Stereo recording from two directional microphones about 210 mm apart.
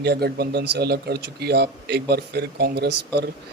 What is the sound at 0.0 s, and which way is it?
A man's voice, 50° right (ahead or behind).